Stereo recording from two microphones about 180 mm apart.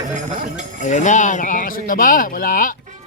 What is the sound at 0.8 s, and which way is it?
Speech, 45° left (ahead or behind).